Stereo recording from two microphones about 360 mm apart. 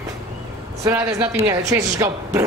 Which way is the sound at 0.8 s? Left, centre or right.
Centre.